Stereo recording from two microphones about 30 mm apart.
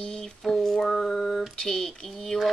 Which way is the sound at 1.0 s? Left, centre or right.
Centre.